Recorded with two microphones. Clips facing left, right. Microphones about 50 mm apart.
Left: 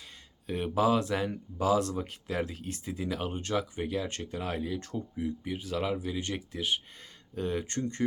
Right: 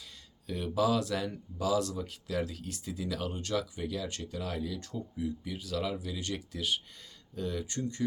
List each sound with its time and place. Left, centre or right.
0.4 s speech: left